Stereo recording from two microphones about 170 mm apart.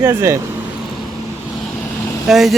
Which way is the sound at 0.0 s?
15° right (ahead or behind).